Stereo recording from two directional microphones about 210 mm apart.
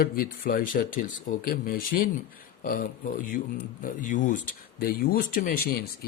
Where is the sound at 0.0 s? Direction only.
45° left (ahead or behind).